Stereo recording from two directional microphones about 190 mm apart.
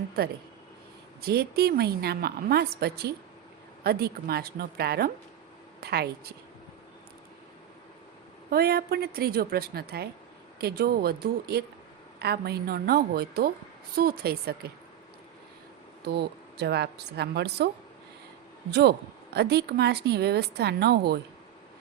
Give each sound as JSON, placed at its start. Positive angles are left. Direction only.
{"t": 0.2, "sound": "a woman's voice", "side_deg": -55}
{"t": 8.4, "sound": "a woman's voice", "side_deg": -55}
{"t": 16.0, "sound": "a woman's voice", "side_deg": -60}
{"t": 18.7, "sound": "a woman's voice", "side_deg": -60}